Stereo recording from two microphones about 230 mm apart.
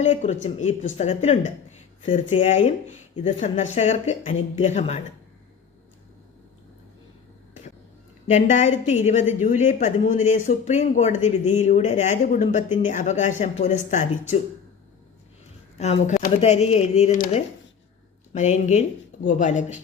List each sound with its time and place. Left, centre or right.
0.0 s speech: left
8.3 s speech: left
15.8 s speech: left